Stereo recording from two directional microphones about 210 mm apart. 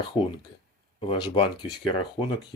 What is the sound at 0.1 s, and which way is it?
Speech, 25° left (ahead or behind).